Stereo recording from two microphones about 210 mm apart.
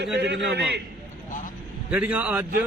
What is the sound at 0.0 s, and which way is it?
Speech, 50° right (ahead or behind).